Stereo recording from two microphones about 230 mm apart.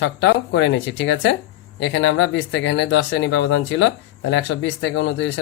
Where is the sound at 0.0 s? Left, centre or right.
Left.